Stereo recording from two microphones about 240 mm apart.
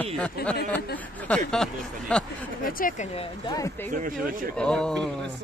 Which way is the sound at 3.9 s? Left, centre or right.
Right.